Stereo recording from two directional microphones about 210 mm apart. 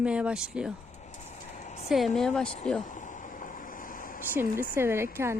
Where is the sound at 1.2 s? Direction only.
35° left (ahead or behind).